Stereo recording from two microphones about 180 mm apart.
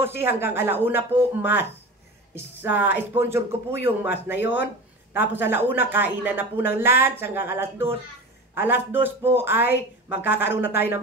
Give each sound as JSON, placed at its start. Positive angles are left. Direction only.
{"t": 0.2, "sound": "speech", "side_deg": -10}